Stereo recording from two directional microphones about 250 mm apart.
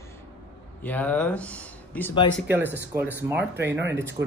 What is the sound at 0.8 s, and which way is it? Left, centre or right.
Speech, centre.